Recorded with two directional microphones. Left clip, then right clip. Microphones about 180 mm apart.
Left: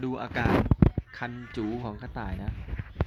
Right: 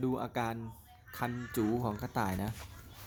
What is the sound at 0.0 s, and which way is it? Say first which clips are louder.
Speech: left 4 dB; 5° left (ahead or behind).